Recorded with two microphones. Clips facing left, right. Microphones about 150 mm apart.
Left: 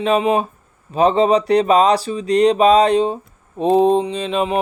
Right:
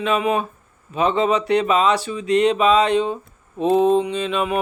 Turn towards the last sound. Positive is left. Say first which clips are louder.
# left 2 dB
turn(degrees=35)  # may be behind; listen again after turning